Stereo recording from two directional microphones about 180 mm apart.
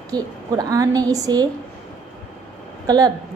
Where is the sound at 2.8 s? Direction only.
20° right (ahead or behind).